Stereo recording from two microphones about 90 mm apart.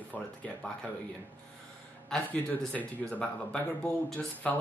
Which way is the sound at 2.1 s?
5° left (ahead or behind).